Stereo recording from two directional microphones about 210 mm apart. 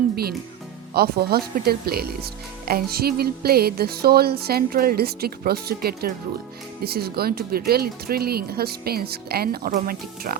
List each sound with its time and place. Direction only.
0.9 s speech: 50° right (ahead or behind)